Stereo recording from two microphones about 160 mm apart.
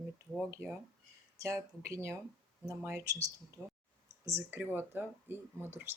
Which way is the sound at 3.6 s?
10° right (ahead or behind).